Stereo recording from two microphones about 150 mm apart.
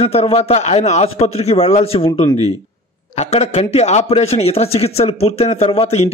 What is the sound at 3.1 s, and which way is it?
A man's voice, 45° left (ahead or behind).